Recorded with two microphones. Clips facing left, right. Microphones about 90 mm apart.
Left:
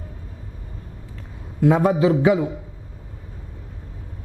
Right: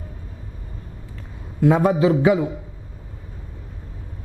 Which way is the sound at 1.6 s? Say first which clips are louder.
Even; 15° right (ahead or behind).